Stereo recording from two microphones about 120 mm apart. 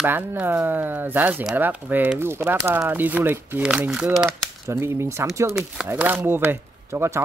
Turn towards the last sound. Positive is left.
turn(degrees=-20)  # may be behind; listen again after turning